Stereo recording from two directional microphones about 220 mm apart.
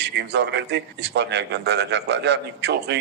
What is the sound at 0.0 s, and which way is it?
A man's voice, 50° right (ahead or behind).